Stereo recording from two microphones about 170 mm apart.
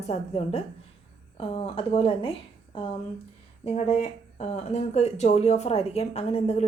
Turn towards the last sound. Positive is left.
turn(degrees=35)  # may be behind; listen again after turning